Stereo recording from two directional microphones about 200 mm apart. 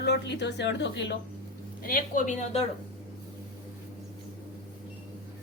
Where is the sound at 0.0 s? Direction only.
60° left (ahead or behind).